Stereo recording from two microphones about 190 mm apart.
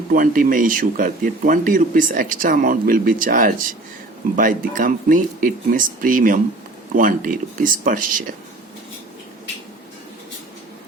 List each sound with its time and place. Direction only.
0.1 s speech: 45° right (ahead or behind)